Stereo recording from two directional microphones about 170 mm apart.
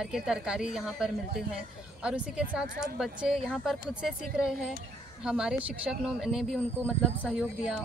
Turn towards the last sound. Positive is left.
turn(degrees=-5)  # may be behind; listen again after turning